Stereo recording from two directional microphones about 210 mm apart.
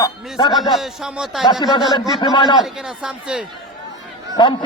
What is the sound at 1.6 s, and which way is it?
A man's voice, 20° left (ahead or behind).